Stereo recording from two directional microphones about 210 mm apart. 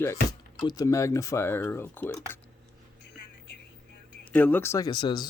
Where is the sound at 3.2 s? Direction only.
55° left (ahead or behind).